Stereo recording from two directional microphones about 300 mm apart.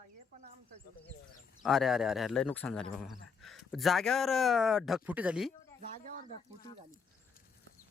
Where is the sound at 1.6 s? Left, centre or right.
Centre.